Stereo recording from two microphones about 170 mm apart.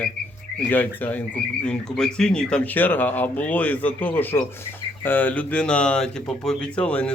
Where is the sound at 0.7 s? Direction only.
10° left (ahead or behind).